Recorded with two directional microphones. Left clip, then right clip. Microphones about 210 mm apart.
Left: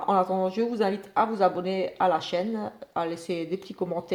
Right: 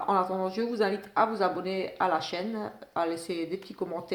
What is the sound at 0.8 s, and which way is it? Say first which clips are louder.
Speech: even; 35° left (ahead or behind).